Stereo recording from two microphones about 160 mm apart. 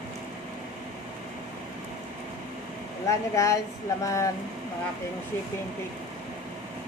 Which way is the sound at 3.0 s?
20° left (ahead or behind).